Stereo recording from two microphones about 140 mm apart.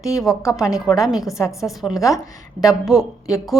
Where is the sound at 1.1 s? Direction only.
Centre (ahead or behind).